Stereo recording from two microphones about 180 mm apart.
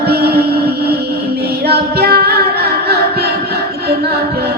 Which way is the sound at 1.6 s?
60° right (ahead or behind).